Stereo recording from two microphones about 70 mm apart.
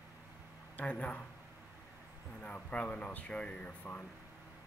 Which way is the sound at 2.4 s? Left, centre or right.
Centre.